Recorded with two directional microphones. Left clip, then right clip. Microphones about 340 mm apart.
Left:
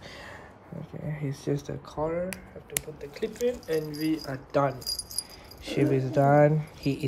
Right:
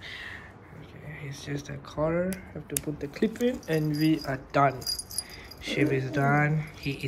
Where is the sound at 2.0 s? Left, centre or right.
Centre.